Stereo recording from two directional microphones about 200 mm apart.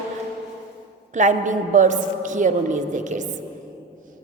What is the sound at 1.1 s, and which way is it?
A woman's voice, 35° right (ahead or behind).